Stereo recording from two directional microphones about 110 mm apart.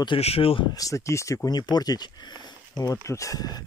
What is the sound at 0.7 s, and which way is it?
Speech, 30° left (ahead or behind).